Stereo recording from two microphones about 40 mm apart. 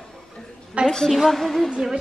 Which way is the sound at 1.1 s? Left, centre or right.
Centre.